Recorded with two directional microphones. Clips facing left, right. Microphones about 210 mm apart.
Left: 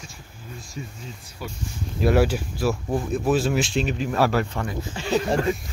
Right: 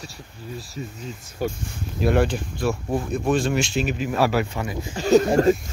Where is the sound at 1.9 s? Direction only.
5° left (ahead or behind).